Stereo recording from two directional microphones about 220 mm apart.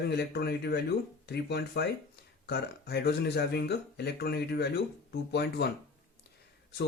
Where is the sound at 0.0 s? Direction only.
50° left (ahead or behind).